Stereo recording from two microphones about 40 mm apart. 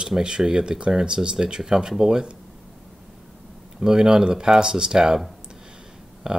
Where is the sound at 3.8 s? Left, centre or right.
Centre.